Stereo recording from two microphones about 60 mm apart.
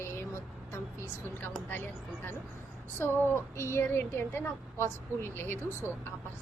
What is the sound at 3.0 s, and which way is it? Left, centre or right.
A woman's voice, left.